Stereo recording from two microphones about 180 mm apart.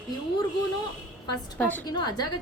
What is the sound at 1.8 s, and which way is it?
Speech, 20° left (ahead or behind).